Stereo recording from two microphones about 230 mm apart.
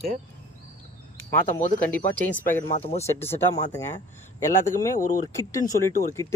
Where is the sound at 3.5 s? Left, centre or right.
Centre.